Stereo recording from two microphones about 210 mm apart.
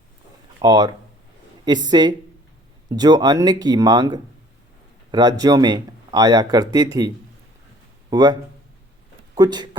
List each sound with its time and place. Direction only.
0.6 s speech: 20° right (ahead or behind)
8.1 s speech: 20° right (ahead or behind)